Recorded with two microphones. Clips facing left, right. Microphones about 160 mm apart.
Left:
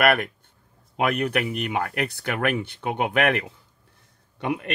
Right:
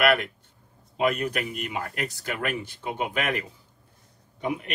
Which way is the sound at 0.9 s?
65° left (ahead or behind).